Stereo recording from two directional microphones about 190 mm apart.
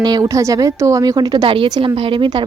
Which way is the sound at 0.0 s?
20° right (ahead or behind).